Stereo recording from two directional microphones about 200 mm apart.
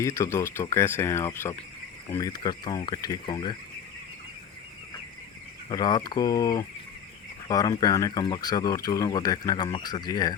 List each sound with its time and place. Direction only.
0.0 s speech: 15° left (ahead or behind)
5.6 s speech: 20° left (ahead or behind)